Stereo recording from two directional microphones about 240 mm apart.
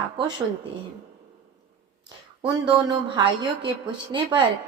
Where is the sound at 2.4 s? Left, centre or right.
Right.